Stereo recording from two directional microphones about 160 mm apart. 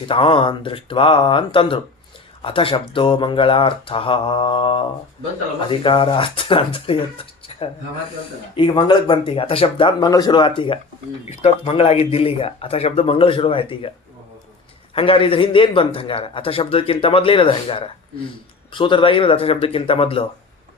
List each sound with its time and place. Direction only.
0.1 s speech: 35° left (ahead or behind)
14.9 s speech: 35° left (ahead or behind)